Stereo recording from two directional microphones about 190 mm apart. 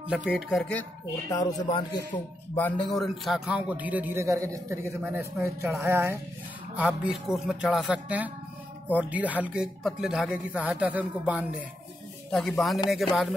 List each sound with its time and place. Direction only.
0.1 s speech: 5° right (ahead or behind)
1.3 s a man's voice: 20° left (ahead or behind)
2.5 s a man's voice: 5° left (ahead or behind)